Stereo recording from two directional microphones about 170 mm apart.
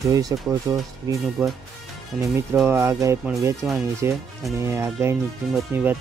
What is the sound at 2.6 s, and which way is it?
Speech, 15° right (ahead or behind).